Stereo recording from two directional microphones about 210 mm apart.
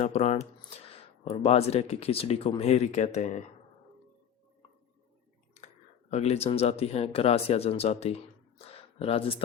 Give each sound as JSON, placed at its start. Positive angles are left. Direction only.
{"t": 0.0, "sound": "speech", "side_deg": 30}
{"t": 5.5, "sound": "speech", "side_deg": 35}
{"t": 8.7, "sound": "a sound", "side_deg": 25}